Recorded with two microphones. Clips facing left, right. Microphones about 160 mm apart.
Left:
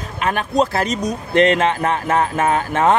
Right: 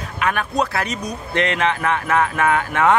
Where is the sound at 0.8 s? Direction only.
45° left (ahead or behind).